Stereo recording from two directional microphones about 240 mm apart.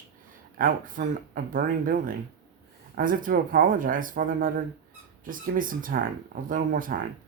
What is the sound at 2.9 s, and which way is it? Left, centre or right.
Speech, right.